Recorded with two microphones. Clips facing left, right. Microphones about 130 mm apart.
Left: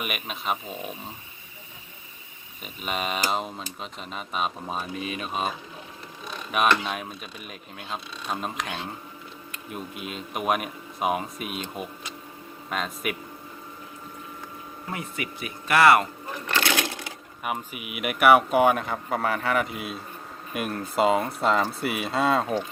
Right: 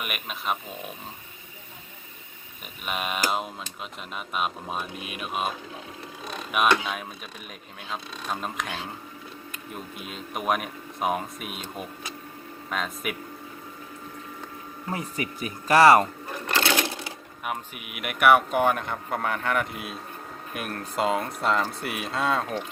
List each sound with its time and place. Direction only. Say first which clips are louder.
0.0 s speech: left 1 dB; centre (ahead or behind)
2.8 s speech: left 1 dB; 5° right (ahead or behind)
14.9 s speech: right 2 dB; 35° right (ahead or behind)
16.6 s sewing machine: right 1 dB; 30° right (ahead or behind)
17.4 s speech: left 2 dB; centre (ahead or behind)